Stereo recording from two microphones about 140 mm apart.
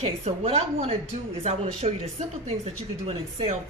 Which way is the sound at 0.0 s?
45° right (ahead or behind).